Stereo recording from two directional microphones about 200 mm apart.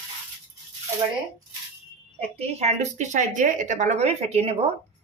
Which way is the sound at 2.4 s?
30° right (ahead or behind).